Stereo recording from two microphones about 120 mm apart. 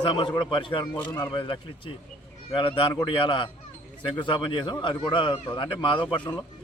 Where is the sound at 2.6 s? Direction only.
45° left (ahead or behind).